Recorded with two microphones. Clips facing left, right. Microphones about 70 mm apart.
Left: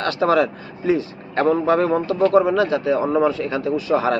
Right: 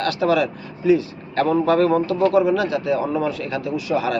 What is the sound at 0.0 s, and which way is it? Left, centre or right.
A man's voice, left.